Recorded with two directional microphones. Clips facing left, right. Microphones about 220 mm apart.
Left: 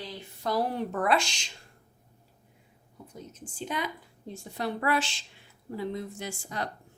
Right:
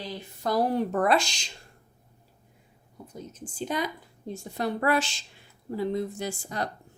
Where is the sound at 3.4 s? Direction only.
40° right (ahead or behind).